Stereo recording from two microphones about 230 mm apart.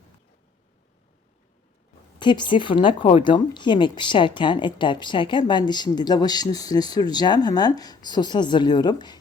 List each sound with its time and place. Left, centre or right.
2.1 s speech: centre